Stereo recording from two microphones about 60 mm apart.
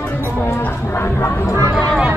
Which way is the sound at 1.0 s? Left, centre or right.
Left.